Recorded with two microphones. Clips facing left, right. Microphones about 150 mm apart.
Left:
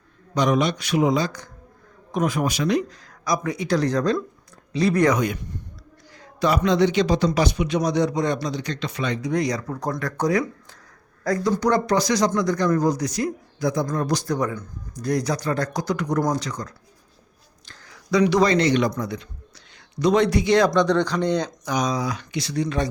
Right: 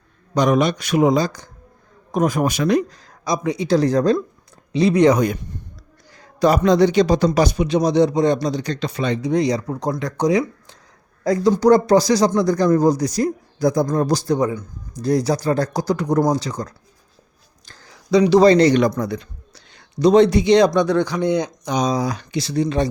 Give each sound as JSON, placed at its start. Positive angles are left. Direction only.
{"t": 0.3, "sound": "a man's voice", "side_deg": -50}
{"t": 2.9, "sound": "speech", "side_deg": -30}
{"t": 4.7, "sound": "speech", "side_deg": -25}
{"t": 5.1, "sound": "speech", "side_deg": -40}
{"t": 11.6, "sound": "a man's voice", "side_deg": -35}
{"t": 20.7, "sound": "speech", "side_deg": -10}